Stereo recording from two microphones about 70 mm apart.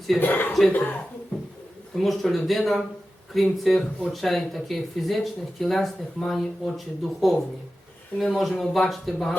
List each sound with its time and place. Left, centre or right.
0.2 s speech: left
2.0 s speech: centre